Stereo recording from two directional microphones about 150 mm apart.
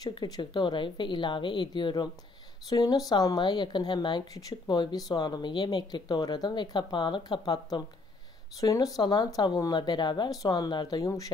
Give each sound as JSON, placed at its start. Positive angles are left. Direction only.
{"t": 0.0, "sound": "speech", "side_deg": 25}